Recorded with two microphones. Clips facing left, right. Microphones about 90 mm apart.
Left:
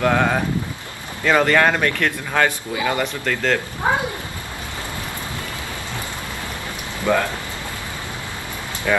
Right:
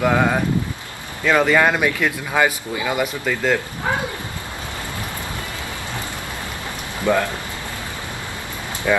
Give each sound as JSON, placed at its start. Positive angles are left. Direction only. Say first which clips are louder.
{"t": 0.0, "sound": "speech", "louder": "even", "side_deg": -5}
{"t": 7.1, "sound": "speech", "louder": "right 1 dB", "side_deg": -15}
{"t": 8.9, "sound": "speech", "louder": "right 1 dB", "side_deg": -10}